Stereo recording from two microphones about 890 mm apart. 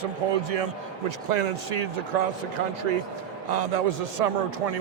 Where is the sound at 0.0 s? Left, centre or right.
Right.